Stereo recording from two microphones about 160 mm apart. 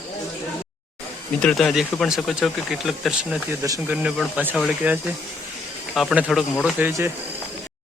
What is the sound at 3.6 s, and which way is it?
Speech, 15° right (ahead or behind).